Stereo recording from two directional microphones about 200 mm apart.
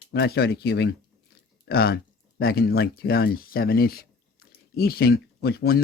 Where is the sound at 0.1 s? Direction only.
55° left (ahead or behind).